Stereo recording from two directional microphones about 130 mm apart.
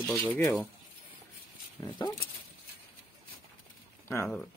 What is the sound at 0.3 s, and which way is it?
Speech, 15° left (ahead or behind).